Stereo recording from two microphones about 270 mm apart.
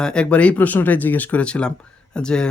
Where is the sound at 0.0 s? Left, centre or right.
Centre.